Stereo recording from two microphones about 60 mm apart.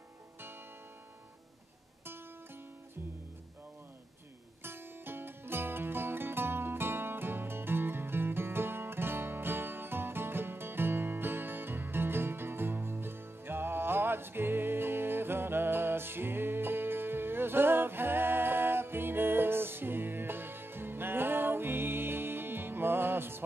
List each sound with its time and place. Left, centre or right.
4.6 s music: right